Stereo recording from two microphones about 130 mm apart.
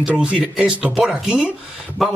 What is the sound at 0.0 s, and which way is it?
Speech, 10° right (ahead or behind).